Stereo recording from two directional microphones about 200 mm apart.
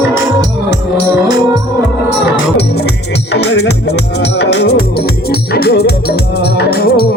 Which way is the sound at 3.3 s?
55° left (ahead or behind).